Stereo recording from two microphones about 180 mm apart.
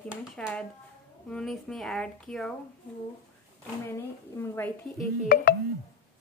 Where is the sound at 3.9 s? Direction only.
15° left (ahead or behind).